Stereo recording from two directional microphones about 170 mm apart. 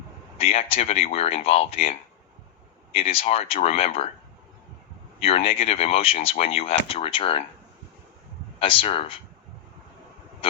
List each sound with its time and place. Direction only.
0.3 s speech: 35° left (ahead or behind)
5.2 s speech: 35° left (ahead or behind)
8.5 s speech: 30° left (ahead or behind)